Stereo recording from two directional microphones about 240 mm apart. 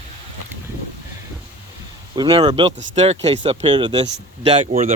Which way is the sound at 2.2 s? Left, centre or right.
Right.